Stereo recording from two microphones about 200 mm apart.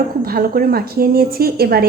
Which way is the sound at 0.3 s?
45° right (ahead or behind).